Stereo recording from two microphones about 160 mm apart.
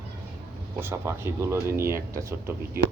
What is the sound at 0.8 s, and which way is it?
Speech, 15° right (ahead or behind).